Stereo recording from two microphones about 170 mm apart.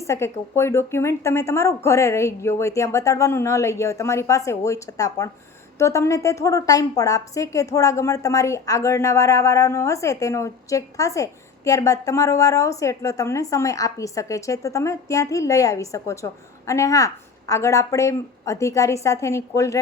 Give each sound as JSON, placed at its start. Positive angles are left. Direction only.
{"t": 0.0, "sound": "a woman's voice", "side_deg": 15}